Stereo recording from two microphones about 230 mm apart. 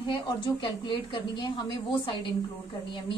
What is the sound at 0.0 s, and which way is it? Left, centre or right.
A woman's voice, left.